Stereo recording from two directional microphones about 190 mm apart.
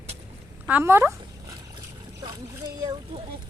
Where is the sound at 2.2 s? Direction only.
20° right (ahead or behind).